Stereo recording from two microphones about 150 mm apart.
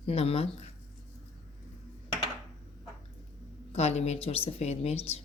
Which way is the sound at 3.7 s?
45° left (ahead or behind).